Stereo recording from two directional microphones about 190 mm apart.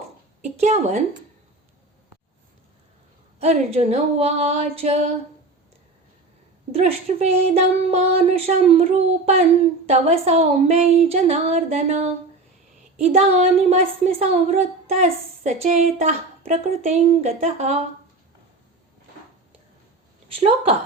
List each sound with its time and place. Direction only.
0.5 s a woman's voice: 35° right (ahead or behind)
3.4 s a woman's voice: 35° right (ahead or behind)
6.7 s a woman's voice: 35° right (ahead or behind)